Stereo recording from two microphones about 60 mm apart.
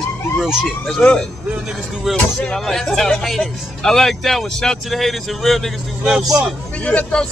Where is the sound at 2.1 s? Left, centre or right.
Centre.